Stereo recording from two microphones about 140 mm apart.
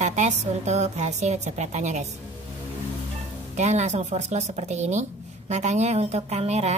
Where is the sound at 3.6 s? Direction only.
55° right (ahead or behind).